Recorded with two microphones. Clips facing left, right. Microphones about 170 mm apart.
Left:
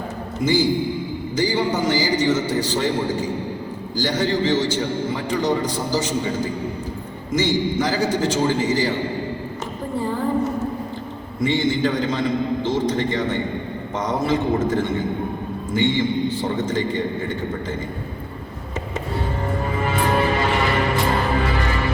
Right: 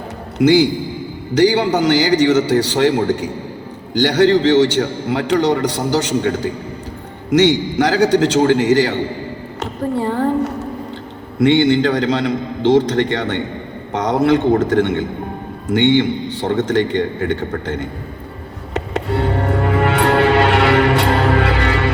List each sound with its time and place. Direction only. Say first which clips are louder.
0.3 s a man's voice: right 7 dB; 75° right (ahead or behind)
9.9 s a sound: right 4 dB; 70° right (ahead or behind)
11.3 s a man's voice: right 8 dB; 75° right (ahead or behind)
18.7 s music: right 7 dB; 70° right (ahead or behind)